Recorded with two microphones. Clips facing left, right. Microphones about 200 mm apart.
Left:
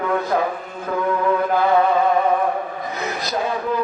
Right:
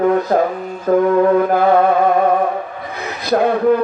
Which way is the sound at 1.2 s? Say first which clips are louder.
Right 6 dB; 50° right (ahead or behind).